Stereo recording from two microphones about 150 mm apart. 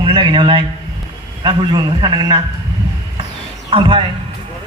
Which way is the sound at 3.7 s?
35° right (ahead or behind).